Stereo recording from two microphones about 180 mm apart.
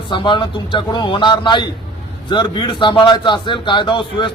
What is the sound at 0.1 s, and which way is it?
Speech, 25° left (ahead or behind).